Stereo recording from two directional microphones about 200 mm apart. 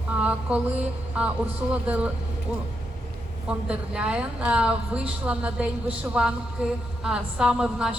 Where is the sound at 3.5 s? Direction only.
5° right (ahead or behind).